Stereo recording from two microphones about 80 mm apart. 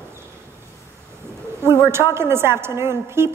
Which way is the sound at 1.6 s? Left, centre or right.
Right.